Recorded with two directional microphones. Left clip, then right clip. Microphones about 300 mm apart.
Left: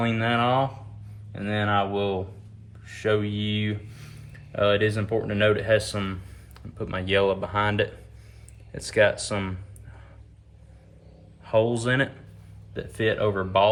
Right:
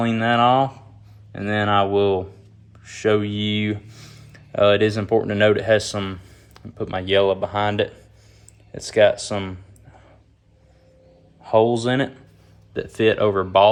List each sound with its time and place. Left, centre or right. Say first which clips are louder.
0.0 s speech: right 6 dB; centre
11.4 s speech: right 5 dB; centre